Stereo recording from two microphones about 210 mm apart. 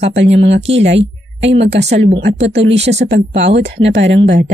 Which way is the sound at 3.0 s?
55° right (ahead or behind).